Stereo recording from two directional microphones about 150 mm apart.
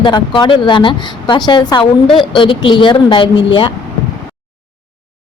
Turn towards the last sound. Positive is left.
turn(degrees=30)  # may be behind; listen again after turning